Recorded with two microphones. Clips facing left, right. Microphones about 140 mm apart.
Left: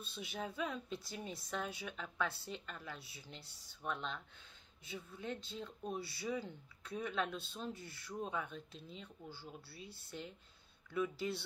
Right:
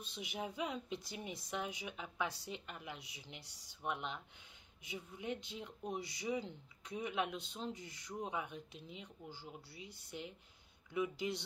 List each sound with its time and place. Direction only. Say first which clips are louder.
0.0 s a woman's voice: even; 15° right (ahead or behind)